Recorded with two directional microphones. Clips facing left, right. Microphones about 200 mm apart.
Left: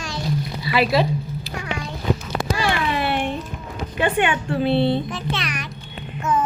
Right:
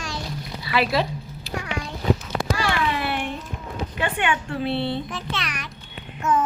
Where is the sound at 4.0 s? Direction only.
20° left (ahead or behind).